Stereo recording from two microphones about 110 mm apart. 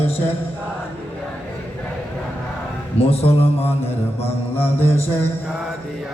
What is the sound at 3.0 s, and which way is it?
Music, 60° left (ahead or behind).